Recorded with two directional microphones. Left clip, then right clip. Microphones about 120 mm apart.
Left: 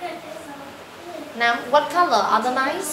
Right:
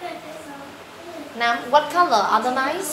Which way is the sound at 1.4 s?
20° right (ahead or behind).